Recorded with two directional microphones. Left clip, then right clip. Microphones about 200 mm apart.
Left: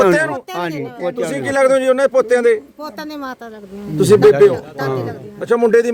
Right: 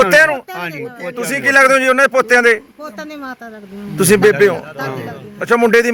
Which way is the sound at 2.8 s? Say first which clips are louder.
Left 1 dB; 30° left (ahead or behind).